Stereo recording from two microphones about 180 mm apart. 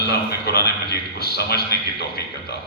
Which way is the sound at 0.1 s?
60° left (ahead or behind).